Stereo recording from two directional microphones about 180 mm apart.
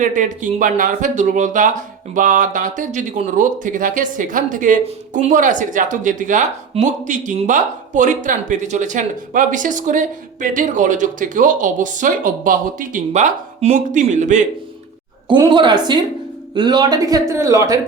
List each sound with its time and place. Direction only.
0.0 s speech: 45° right (ahead or behind)
15.3 s speech: 25° right (ahead or behind)